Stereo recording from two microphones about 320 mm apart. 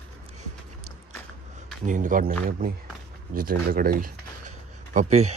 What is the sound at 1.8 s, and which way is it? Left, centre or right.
Speech, right.